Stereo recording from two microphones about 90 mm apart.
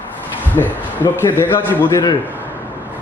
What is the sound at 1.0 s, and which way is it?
Speech, 25° left (ahead or behind).